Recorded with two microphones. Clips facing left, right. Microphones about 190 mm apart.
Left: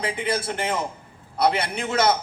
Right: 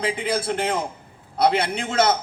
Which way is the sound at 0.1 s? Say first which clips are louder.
Right 2 dB; 55° right (ahead or behind).